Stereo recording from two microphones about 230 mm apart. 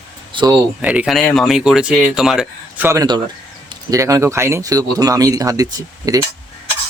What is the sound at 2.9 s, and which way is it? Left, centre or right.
Speech, centre.